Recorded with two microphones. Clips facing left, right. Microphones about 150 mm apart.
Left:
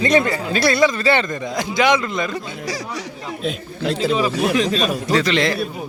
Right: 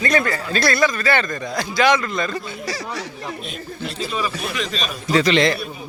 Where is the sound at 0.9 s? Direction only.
25° left (ahead or behind).